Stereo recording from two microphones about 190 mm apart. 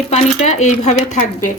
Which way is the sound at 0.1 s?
35° left (ahead or behind).